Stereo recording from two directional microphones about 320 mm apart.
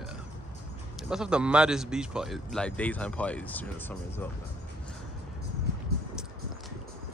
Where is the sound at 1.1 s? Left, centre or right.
Centre.